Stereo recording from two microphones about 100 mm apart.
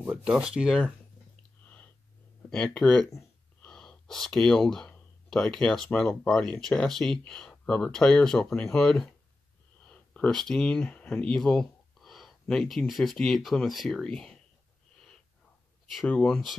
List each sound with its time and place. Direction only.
0.1 s speech: 5° right (ahead or behind)
2.5 s speech: 5° left (ahead or behind)
3.6 s gasp: 10° left (ahead or behind)
5.9 s speech: 10° left (ahead or behind)
16.1 s speech: 15° left (ahead or behind)